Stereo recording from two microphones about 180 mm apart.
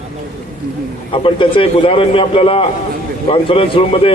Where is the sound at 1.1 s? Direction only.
30° left (ahead or behind).